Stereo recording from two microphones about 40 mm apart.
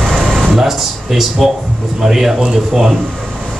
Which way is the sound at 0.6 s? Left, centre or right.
Centre.